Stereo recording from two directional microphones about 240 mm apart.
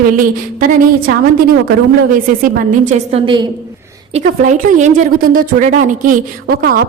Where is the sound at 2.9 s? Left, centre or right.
Right.